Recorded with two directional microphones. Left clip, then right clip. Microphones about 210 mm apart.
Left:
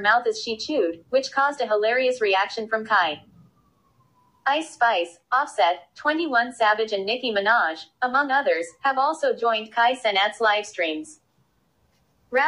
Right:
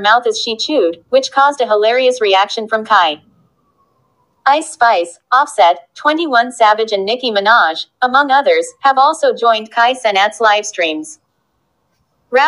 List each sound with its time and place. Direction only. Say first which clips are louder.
0.0 s a woman's voice: right 9 dB; 35° right (ahead or behind)
4.5 s a woman's voice: right 10 dB; 35° right (ahead or behind)